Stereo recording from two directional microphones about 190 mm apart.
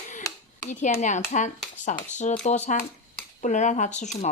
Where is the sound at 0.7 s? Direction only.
35° left (ahead or behind).